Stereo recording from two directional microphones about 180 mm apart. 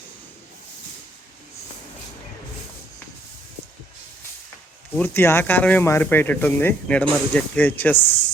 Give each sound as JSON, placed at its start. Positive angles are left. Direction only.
{"t": 4.9, "sound": "speech", "side_deg": 10}
{"t": 7.9, "sound": "speech", "side_deg": 30}